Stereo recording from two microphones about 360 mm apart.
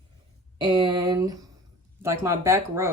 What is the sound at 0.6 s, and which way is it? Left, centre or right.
A woman's voice, centre.